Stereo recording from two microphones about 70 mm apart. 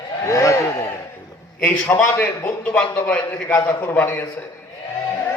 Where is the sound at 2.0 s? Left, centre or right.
Left.